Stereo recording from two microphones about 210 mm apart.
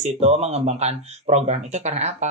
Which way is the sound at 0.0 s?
30° right (ahead or behind).